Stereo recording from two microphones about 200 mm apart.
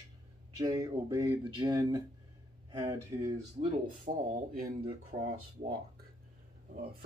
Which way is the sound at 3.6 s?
45° right (ahead or behind).